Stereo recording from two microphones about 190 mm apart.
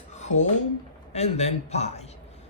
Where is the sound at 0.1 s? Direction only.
40° left (ahead or behind).